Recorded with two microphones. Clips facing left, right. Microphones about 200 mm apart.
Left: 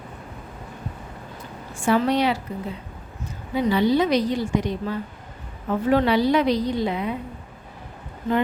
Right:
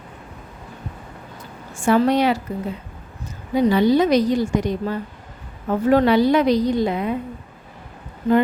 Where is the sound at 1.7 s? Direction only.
45° right (ahead or behind).